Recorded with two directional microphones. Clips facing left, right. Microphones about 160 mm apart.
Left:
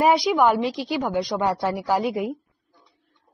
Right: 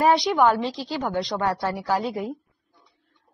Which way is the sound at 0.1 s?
Centre (ahead or behind).